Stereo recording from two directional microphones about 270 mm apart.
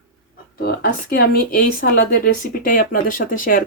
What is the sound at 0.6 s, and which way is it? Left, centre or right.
Speech, left.